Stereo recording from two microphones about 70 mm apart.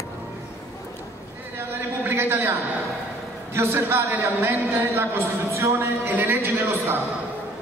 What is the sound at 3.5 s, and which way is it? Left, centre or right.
A man's voice, right.